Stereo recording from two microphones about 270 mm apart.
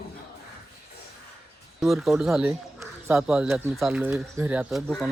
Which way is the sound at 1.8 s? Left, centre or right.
Centre.